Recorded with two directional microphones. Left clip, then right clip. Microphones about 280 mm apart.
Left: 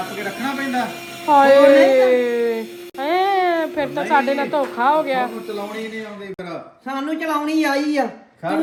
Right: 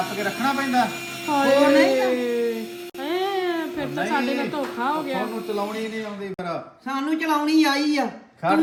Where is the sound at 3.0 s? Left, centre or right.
Centre.